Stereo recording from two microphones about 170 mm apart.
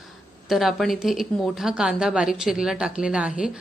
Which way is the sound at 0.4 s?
Centre (ahead or behind).